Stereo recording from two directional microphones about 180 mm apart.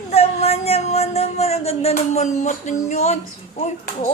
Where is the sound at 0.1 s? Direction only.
35° left (ahead or behind).